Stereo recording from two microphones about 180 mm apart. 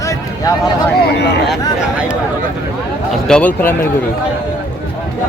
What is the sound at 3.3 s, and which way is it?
Speech, 10° left (ahead or behind).